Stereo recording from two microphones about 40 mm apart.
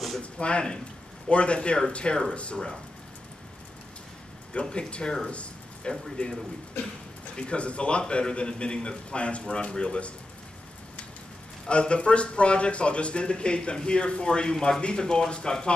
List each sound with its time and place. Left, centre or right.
0.2 s speech: left
4.6 s speech: left
5.3 s a sound: left
6.2 s speech: left
11.7 s speech: left